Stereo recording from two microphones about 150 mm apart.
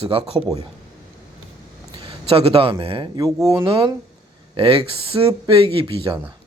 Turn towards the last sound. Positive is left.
turn(degrees=-35)  # may be behind; listen again after turning